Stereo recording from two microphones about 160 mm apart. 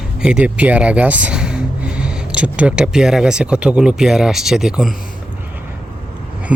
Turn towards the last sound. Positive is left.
turn(degrees=-10)  # may be behind; listen again after turning